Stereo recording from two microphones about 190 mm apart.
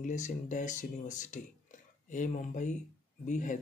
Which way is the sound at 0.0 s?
40° left (ahead or behind).